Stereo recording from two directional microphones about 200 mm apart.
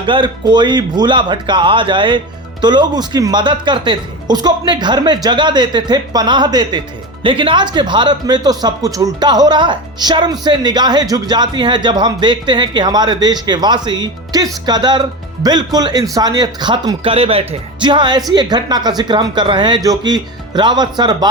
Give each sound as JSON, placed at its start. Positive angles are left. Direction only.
{"t": 0.0, "sound": "speech", "side_deg": -25}